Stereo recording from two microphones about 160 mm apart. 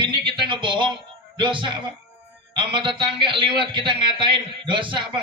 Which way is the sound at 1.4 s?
30° right (ahead or behind).